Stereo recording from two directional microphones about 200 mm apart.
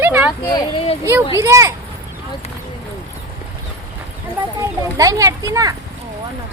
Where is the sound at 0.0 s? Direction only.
10° right (ahead or behind).